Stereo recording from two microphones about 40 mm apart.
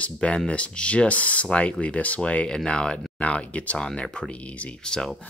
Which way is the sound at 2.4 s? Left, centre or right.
Centre.